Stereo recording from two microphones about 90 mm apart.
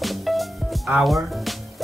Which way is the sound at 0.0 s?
Centre (ahead or behind).